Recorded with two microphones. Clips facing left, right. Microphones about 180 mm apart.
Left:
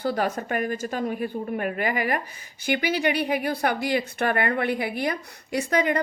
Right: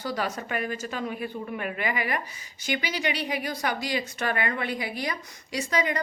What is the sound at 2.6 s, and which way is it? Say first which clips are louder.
A woman's voice: left 5 dB; 55° left (ahead or behind).